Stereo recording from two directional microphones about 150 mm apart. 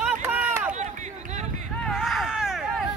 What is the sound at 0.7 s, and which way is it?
Run, 50° right (ahead or behind).